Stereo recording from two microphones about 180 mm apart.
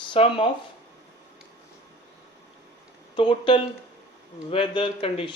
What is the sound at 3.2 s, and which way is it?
A man's voice, 30° left (ahead or behind).